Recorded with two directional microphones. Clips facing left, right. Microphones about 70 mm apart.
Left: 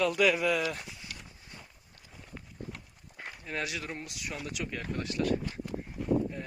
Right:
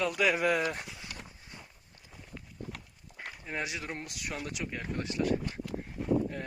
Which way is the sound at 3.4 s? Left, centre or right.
Centre.